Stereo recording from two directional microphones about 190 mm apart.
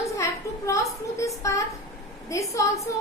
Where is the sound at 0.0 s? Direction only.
15° left (ahead or behind).